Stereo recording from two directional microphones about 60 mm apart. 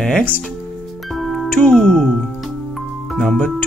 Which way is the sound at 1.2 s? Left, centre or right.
Centre.